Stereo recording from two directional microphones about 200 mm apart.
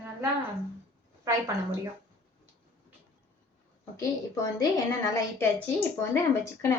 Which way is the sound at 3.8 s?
15° left (ahead or behind).